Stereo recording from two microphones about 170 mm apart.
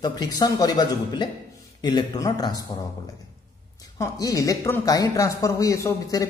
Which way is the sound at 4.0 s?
20° left (ahead or behind).